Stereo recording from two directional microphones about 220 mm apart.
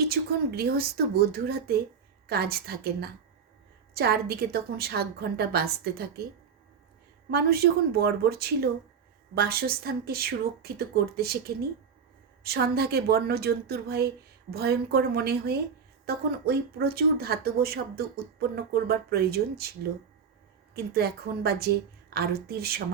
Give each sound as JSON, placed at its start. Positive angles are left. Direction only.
{"t": 0.1, "sound": "speech", "side_deg": -45}
{"t": 7.3, "sound": "speech", "side_deg": -45}
{"t": 20.7, "sound": "speech", "side_deg": -45}